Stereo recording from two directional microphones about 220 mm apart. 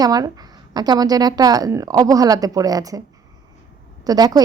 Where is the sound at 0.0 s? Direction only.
15° right (ahead or behind).